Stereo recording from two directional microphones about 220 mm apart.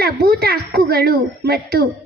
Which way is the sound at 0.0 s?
45° right (ahead or behind).